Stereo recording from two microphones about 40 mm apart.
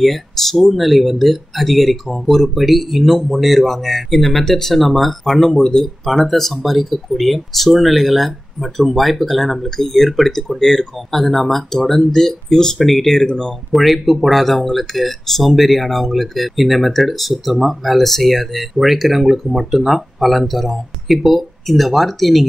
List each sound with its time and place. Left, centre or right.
0.0 s speech: centre
13.7 s speech: centre